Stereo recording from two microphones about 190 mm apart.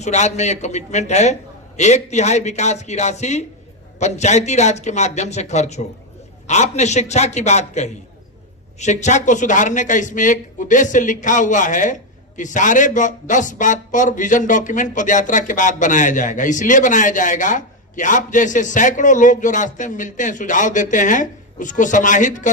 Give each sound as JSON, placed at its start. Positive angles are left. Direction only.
{"t": 0.0, "sound": "a man's voice", "side_deg": 35}